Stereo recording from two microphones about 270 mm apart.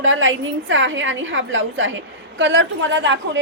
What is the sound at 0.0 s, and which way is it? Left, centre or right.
A woman's voice, right.